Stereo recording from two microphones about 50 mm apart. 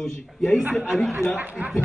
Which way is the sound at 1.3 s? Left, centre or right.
Right.